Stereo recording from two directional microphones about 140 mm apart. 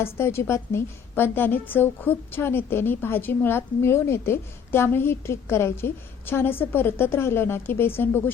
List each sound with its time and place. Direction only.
0.0 s a woman's voice: 15° left (ahead or behind)